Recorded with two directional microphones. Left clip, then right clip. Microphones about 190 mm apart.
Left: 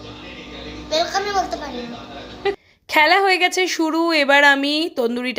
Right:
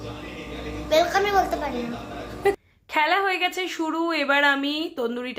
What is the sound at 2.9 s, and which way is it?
A woman's voice, 45° left (ahead or behind).